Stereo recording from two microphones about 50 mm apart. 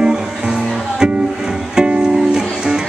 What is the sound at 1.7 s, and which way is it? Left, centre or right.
Music, centre.